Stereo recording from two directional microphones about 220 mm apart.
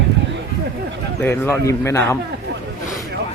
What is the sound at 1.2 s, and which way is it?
Speech, 10° left (ahead or behind).